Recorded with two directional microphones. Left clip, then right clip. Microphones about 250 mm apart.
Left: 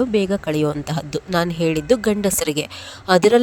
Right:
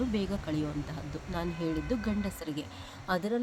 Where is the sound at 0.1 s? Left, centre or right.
Left.